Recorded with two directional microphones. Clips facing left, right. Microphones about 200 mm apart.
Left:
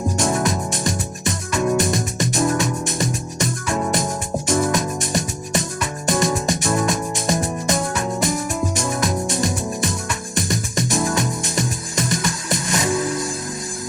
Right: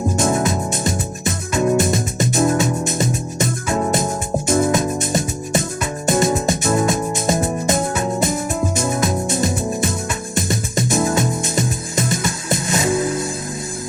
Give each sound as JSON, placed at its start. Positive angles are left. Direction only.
{"t": 0.2, "sound": "music", "side_deg": -25}